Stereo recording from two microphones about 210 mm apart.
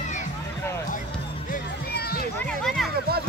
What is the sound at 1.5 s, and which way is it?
Music, 50° left (ahead or behind).